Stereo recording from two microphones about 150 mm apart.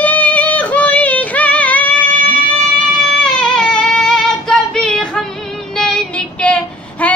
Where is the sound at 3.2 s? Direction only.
5° left (ahead or behind).